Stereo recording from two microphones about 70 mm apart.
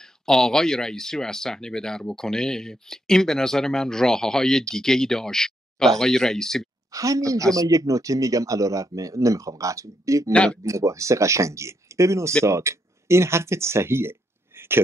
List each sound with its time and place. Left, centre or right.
0.0 s speech: centre
6.9 s speech: right
10.3 s speech: centre
10.6 s speech: right